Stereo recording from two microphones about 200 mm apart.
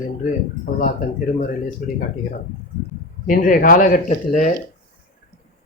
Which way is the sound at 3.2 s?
40° left (ahead or behind).